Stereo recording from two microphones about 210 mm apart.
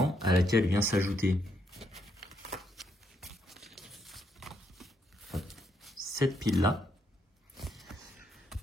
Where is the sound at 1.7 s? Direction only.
Centre (ahead or behind).